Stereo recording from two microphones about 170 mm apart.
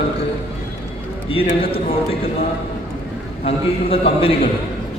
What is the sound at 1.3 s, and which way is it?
Speech, 30° left (ahead or behind).